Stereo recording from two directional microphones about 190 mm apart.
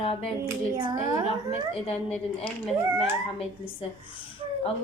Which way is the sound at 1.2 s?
30° left (ahead or behind).